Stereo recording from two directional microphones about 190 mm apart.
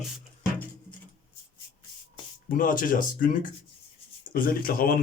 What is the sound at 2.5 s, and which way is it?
Speech, 45° left (ahead or behind).